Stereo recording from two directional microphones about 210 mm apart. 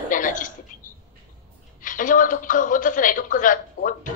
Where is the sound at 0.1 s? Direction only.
40° left (ahead or behind).